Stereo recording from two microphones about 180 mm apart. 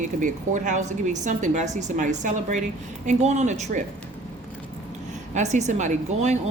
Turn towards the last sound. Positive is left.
turn(degrees=-40)  # may be behind; listen again after turning